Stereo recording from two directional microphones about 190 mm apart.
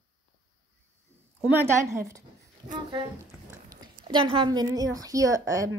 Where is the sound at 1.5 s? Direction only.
15° right (ahead or behind).